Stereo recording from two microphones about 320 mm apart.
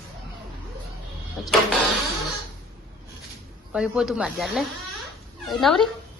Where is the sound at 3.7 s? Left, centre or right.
Centre.